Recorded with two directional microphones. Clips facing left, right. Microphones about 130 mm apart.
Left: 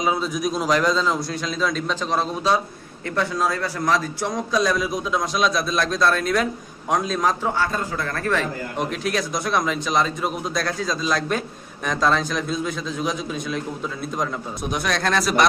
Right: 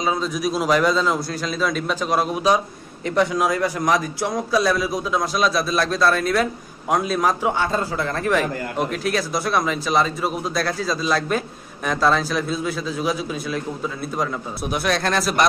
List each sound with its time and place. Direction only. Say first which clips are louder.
0.0 s a man's voice: even; 10° left (ahead or behind)
0.3 s a man's voice: right 2 dB; 5° right (ahead or behind)
8.9 s a man's voice: right 2 dB; centre (ahead or behind)